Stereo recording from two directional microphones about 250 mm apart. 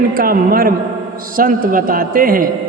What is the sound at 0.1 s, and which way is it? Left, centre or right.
A man's voice, right.